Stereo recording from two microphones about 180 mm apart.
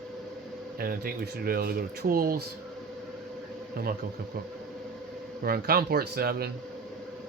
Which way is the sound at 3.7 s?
55° right (ahead or behind).